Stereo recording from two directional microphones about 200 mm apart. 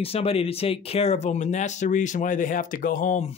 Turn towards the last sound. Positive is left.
turn(degrees=35)  # may be behind; listen again after turning